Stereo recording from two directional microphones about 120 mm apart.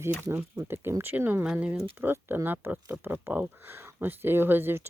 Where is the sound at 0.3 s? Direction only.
20° right (ahead or behind).